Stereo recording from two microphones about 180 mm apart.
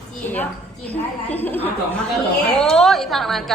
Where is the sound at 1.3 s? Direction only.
10° left (ahead or behind).